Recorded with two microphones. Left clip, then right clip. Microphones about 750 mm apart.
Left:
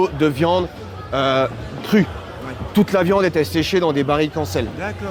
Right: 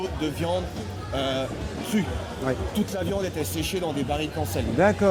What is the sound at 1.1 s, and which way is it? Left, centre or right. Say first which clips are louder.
Speech: left 10 dB; left.